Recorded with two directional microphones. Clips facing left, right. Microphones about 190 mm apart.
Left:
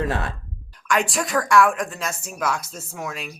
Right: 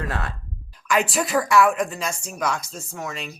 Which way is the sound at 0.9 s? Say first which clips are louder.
Right 1 dB; centre (ahead or behind).